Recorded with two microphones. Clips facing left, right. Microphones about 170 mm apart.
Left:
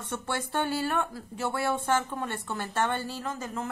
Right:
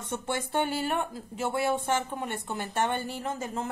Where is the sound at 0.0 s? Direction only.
15° right (ahead or behind).